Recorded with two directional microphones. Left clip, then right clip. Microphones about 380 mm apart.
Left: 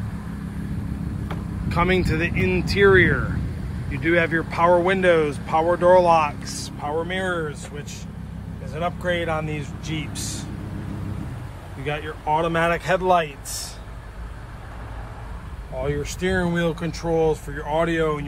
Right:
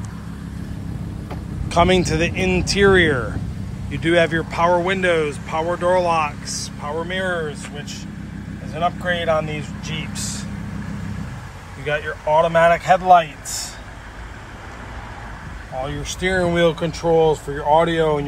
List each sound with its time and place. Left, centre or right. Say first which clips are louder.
1.7 s speech: right 5 dB; centre
8.7 s speech: right 3 dB; centre
11.8 s speech: right 5 dB; centre
15.8 s speech: right 1 dB; centre